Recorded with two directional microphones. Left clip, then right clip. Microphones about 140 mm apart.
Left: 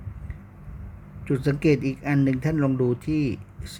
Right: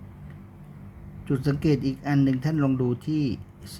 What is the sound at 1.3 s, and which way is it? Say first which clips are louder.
Speech: left 3 dB; 15° left (ahead or behind).